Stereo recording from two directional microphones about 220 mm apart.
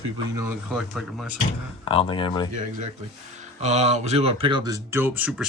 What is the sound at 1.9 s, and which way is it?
Speech, 25° left (ahead or behind).